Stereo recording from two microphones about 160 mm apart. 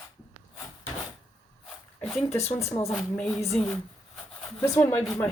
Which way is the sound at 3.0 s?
5° left (ahead or behind).